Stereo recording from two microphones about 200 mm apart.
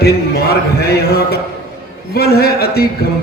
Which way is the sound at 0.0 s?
50° left (ahead or behind).